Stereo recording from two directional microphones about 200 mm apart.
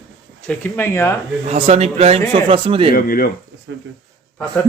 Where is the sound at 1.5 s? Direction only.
35° right (ahead or behind).